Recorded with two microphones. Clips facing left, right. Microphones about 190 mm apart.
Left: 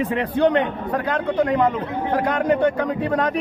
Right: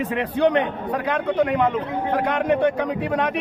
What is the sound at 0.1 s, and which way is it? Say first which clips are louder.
A man's voice: even; 5° right (ahead or behind).